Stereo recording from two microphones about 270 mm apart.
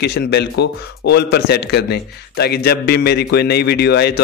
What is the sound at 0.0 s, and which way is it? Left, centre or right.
A man's voice, left.